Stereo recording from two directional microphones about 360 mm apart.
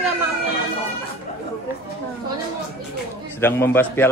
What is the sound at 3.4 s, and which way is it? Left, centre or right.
Speech, centre.